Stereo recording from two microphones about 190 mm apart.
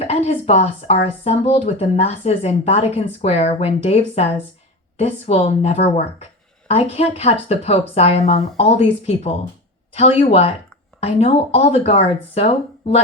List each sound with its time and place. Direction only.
0.0 s speech: 30° left (ahead or behind)